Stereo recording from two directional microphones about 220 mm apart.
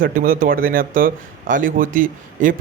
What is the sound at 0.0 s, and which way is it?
A man's voice, 40° right (ahead or behind).